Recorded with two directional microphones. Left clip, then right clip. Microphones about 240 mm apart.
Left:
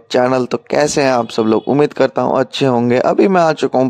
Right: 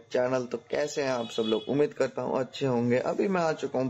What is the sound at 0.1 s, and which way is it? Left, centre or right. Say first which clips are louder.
Speech: left 14 dB; left.